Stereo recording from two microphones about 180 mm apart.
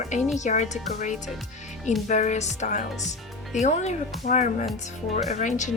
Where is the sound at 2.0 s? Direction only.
40° left (ahead or behind).